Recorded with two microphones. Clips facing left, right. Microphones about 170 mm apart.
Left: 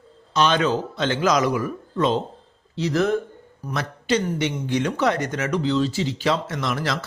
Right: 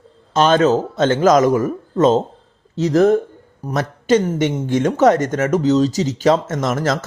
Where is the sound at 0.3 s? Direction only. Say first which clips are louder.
Right 6 dB; 45° right (ahead or behind).